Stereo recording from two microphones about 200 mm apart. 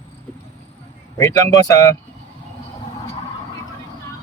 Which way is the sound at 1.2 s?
15° left (ahead or behind).